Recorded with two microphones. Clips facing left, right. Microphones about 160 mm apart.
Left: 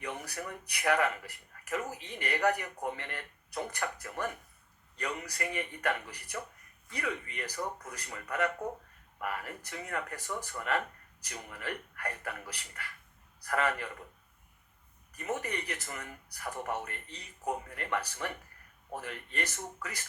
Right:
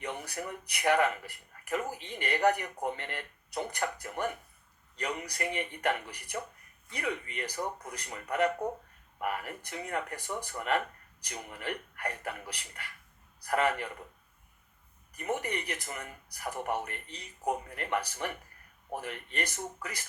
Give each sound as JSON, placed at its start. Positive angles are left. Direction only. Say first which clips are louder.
{"t": 0.0, "sound": "speech", "louder": "right 2 dB", "side_deg": -20}
{"t": 15.1, "sound": "speech", "louder": "right 2 dB", "side_deg": -20}